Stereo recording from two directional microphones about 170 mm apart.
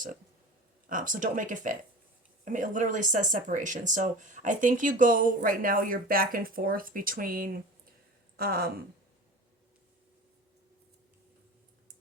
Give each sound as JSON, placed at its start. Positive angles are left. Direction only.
{"t": 0.9, "sound": "speech", "side_deg": -50}